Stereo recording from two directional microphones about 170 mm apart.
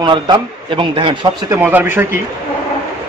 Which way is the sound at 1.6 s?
10° right (ahead or behind).